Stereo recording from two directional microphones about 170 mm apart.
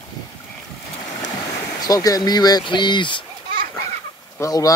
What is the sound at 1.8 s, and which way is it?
Speech, 20° left (ahead or behind).